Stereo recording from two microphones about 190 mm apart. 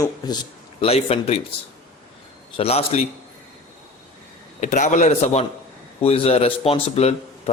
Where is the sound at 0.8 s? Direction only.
30° left (ahead or behind).